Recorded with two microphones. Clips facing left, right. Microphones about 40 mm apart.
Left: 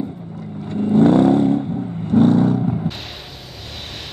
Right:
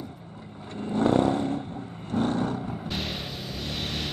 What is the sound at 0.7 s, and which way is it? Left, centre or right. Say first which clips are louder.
Vehicle: left 10 dB; left.